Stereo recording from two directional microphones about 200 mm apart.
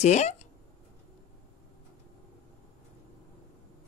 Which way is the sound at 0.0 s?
35° left (ahead or behind).